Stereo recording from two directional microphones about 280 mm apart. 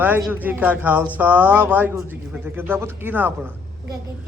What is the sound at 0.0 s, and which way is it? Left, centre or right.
Speech, centre.